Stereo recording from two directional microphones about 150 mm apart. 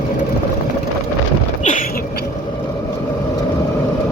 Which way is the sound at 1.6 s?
55° left (ahead or behind).